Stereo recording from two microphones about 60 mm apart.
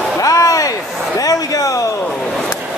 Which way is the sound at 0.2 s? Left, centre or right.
Left.